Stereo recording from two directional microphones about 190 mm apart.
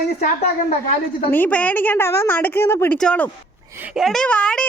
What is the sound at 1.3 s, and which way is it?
Speech, 10° left (ahead or behind).